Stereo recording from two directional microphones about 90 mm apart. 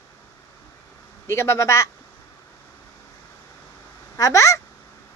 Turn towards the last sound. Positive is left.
turn(degrees=35)  # may be behind; listen again after turning